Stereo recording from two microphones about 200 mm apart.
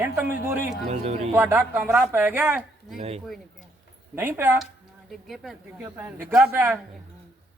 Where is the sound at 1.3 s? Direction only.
10° right (ahead or behind).